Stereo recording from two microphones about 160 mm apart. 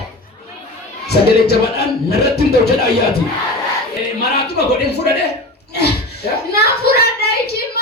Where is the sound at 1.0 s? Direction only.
80° left.